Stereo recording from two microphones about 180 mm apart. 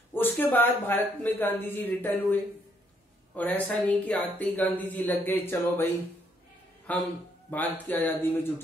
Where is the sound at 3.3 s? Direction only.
10° left (ahead or behind).